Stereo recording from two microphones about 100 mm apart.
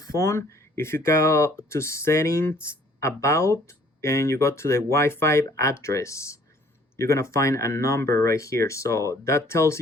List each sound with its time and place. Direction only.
0.0 s speech: 30° left (ahead or behind)